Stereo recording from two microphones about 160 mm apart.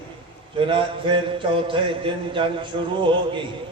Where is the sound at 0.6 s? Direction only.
30° right (ahead or behind).